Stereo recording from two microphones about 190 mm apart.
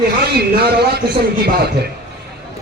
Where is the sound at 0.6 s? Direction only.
55° right (ahead or behind).